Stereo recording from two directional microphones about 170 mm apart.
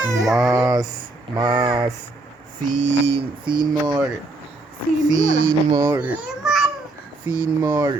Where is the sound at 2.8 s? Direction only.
90° right.